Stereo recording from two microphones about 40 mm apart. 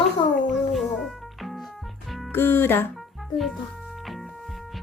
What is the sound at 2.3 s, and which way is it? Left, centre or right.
Speech, left.